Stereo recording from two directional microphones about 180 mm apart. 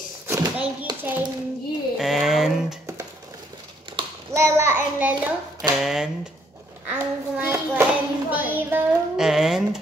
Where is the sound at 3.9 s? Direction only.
15° right (ahead or behind).